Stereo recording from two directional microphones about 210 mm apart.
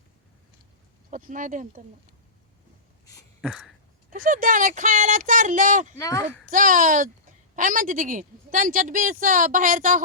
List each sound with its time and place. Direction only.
1.1 s a woman's voice: 40° right (ahead or behind)
3.4 s a sound: 5° right (ahead or behind)
4.1 s a woman's voice: 40° right (ahead or behind)
6.0 s speech: 15° left (ahead or behind)
6.4 s a woman's voice: 40° right (ahead or behind)